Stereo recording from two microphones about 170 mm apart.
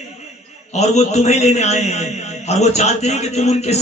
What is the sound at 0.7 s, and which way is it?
A man's voice, 40° left (ahead or behind).